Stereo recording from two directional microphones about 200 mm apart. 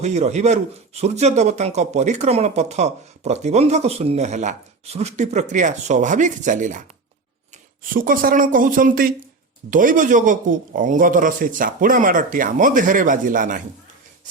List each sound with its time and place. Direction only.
0.0 s a man's voice: 35° right (ahead or behind)
7.9 s a man's voice: 45° right (ahead or behind)